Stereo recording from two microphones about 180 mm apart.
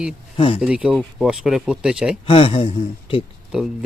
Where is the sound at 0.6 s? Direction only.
5° right (ahead or behind).